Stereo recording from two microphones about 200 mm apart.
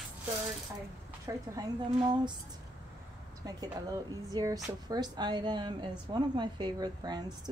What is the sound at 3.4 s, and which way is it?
A woman's voice, 20° right (ahead or behind).